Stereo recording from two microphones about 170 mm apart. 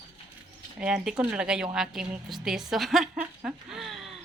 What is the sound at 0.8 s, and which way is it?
A woman's voice, 5° right (ahead or behind).